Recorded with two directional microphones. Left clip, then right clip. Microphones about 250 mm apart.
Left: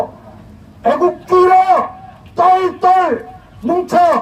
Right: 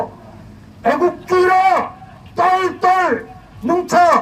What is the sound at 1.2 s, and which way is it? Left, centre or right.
Speech, centre.